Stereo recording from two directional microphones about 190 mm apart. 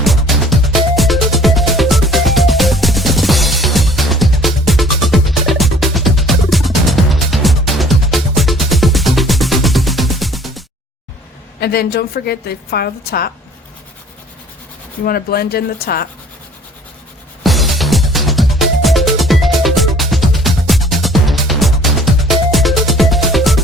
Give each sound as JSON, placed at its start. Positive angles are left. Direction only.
{"t": 0.0, "sound": "music", "side_deg": 0}
{"t": 11.6, "sound": "a woman's voice", "side_deg": 55}
{"t": 15.0, "sound": "speech", "side_deg": 50}
{"t": 17.4, "sound": "music", "side_deg": 0}